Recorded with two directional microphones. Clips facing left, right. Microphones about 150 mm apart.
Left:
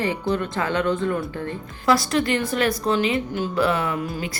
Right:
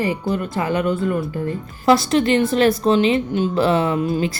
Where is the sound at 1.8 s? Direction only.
25° right (ahead or behind).